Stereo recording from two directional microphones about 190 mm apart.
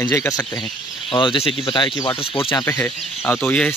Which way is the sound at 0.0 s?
15° left (ahead or behind).